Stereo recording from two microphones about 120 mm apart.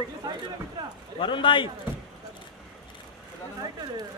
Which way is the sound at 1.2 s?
45° left (ahead or behind).